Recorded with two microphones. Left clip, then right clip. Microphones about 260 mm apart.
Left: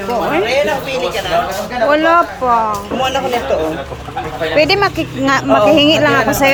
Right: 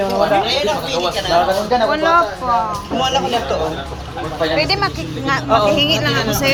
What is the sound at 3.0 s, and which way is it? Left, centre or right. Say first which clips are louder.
Speech: even; left.